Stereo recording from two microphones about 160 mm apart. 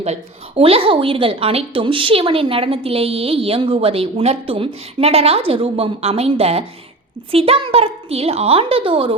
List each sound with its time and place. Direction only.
0.0 s a woman's voice: 40° right (ahead or behind)